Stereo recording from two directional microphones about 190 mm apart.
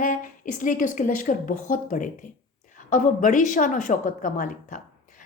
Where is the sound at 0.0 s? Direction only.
40° left (ahead or behind).